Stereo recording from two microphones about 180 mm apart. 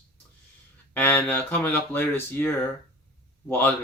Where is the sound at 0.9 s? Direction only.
10° left (ahead or behind).